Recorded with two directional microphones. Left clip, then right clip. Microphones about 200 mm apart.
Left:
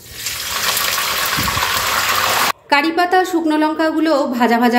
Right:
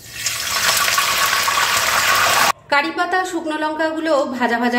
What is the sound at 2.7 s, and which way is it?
A woman's voice, 25° left (ahead or behind).